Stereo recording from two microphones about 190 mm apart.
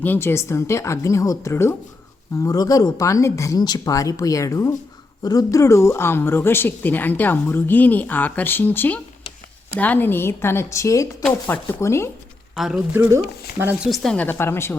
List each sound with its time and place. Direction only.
0.0 s speech: 10° left (ahead or behind)
12.5 s speech: 5° right (ahead or behind)
13.9 s speech: 5° left (ahead or behind)